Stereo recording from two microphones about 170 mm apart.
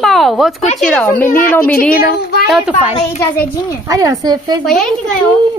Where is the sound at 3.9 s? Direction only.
20° right (ahead or behind).